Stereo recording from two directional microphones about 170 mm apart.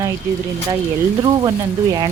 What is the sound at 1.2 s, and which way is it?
Speech, 25° right (ahead or behind).